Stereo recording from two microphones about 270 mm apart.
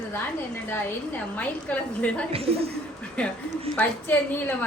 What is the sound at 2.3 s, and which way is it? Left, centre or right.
Speech, right.